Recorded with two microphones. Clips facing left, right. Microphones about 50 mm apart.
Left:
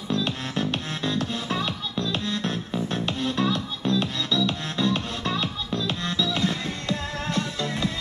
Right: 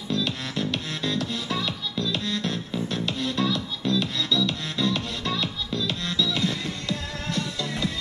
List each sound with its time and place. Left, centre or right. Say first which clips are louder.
0.1 s music: left 1 dB; left